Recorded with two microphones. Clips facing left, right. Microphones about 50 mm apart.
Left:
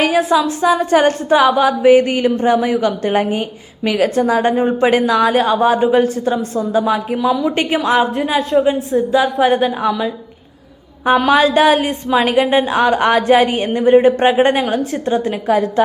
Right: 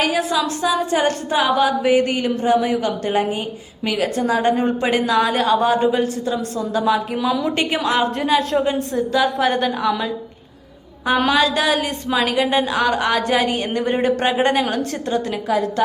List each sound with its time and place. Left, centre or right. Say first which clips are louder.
0.0 s a woman's voice: left 5 dB; left
7.2 s a woman's voice: left 4 dB; centre
7.5 s a woman's voice: left 4 dB; left
8.4 s a woman's voice: left 5 dB; centre
11.3 s a woman's voice: left 8 dB; left
13.7 s a woman's voice: left 12 dB; centre
14.2 s a woman's voice: left 5 dB; left